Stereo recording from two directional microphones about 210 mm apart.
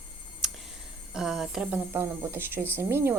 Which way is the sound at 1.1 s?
Centre (ahead or behind).